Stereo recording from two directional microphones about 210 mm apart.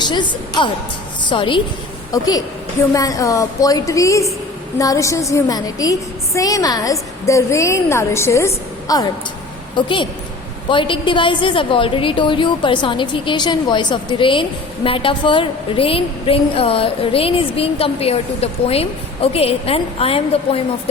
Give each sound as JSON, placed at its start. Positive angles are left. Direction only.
{"t": 0.0, "sound": "a woman's voice", "side_deg": 20}